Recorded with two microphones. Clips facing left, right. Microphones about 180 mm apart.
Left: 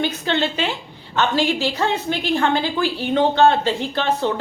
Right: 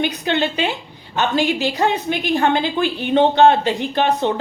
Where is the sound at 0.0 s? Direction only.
15° right (ahead or behind).